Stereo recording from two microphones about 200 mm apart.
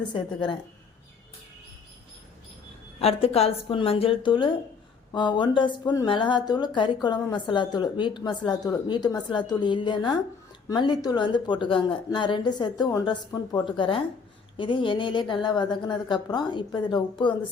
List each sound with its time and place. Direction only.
0.1 s speech: 25° left (ahead or behind)
3.0 s speech: 30° left (ahead or behind)